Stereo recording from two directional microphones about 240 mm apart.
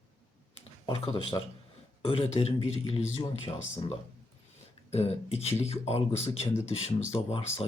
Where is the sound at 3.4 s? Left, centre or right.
Left.